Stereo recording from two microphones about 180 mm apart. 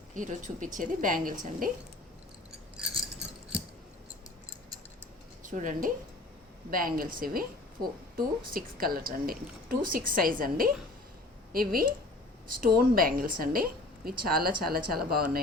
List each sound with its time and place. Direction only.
0.1 s a woman's voice: 45° right (ahead or behind)
5.5 s a woman's voice: 45° right (ahead or behind)